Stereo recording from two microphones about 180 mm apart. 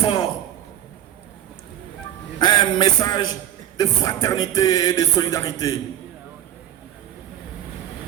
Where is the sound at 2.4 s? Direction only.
25° left (ahead or behind).